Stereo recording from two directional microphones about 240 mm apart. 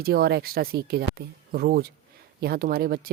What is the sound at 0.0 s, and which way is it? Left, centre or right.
Speech, right.